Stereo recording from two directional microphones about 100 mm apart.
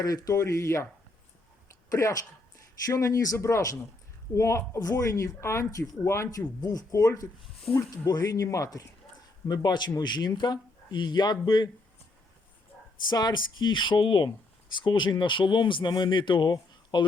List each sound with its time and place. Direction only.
0.0 s speech: 35° left (ahead or behind)
1.9 s speech: 35° left (ahead or behind)
9.6 s speech: 45° left (ahead or behind)
13.1 s speech: 45° left (ahead or behind)